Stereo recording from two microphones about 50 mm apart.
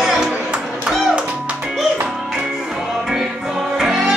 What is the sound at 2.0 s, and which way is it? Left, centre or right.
Music, centre.